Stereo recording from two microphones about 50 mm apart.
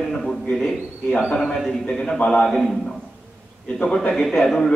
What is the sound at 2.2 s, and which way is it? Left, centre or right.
Speech, centre.